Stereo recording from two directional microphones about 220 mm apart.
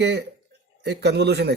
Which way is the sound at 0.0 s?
50° right (ahead or behind).